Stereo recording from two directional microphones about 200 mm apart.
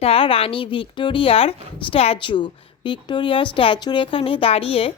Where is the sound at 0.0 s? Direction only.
30° left (ahead or behind).